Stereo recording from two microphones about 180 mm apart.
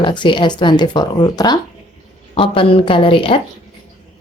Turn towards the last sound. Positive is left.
turn(degrees=30)  # may be behind; listen again after turning